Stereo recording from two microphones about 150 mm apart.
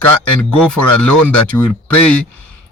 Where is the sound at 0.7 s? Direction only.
10° left (ahead or behind).